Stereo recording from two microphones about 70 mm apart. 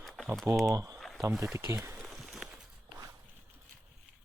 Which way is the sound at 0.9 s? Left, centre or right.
Centre.